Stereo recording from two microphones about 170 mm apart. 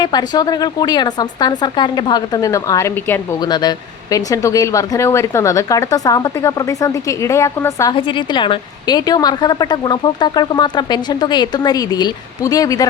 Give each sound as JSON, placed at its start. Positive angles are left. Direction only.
{"t": 0.0, "sound": "a woman's voice", "side_deg": 25}
{"t": 7.9, "sound": "a woman's voice", "side_deg": 30}